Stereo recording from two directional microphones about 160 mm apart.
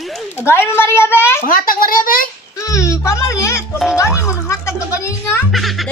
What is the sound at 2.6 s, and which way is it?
Music, 20° left (ahead or behind).